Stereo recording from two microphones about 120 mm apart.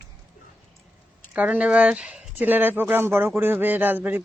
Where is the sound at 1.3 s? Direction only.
10° right (ahead or behind).